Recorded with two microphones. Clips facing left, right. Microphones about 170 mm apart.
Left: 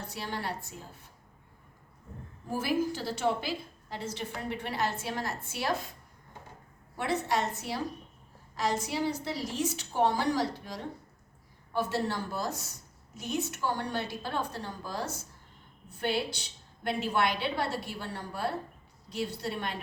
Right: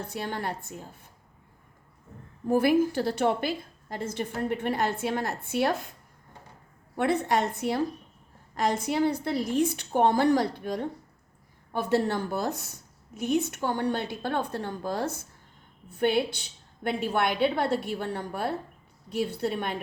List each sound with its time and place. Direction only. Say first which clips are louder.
0.1 s a woman's voice: right 2 dB; 55° right (ahead or behind)
2.5 s a woman's voice: right 8 dB; 60° right (ahead or behind)
6.9 s a woman's voice: right 5 dB; 55° right (ahead or behind)